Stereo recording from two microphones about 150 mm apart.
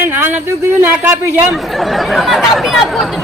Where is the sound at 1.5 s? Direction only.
Centre (ahead or behind).